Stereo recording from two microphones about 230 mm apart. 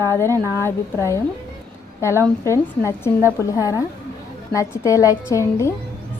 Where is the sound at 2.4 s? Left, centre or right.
Centre.